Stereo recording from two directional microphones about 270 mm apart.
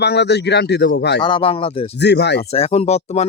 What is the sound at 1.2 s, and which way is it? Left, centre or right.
Speech, centre.